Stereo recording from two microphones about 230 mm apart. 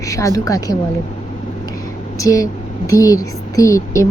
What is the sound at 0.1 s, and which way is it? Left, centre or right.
Speech, centre.